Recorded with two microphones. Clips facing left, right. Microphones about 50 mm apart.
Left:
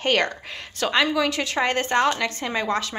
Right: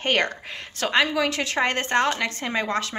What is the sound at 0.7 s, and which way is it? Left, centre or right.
A woman's voice, right.